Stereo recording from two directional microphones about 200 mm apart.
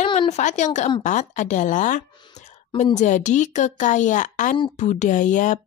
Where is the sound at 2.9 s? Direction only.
35° left (ahead or behind).